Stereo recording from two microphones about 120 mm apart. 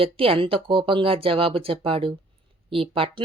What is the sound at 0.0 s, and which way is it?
Speech, 50° right (ahead or behind).